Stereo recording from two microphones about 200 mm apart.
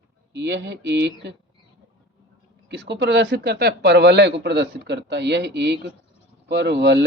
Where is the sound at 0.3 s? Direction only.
60° right (ahead or behind).